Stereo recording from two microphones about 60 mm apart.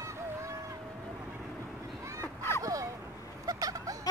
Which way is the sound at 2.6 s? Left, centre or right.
Right.